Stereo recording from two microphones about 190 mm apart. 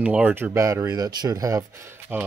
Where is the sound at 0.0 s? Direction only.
5° right (ahead or behind).